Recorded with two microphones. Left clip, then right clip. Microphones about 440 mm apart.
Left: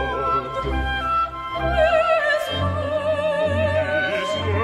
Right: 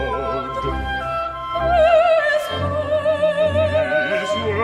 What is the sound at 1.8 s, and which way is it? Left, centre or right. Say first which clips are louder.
Opera: right 3 dB; right.